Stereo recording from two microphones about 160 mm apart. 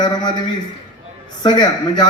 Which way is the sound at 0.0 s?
25° left (ahead or behind).